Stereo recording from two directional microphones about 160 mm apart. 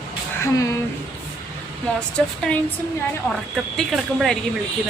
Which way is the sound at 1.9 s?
5° left (ahead or behind).